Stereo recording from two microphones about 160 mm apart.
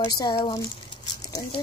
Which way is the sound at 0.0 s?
25° left (ahead or behind).